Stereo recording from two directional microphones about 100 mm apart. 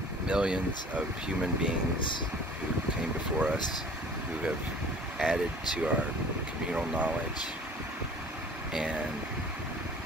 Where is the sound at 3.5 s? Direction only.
45° left (ahead or behind).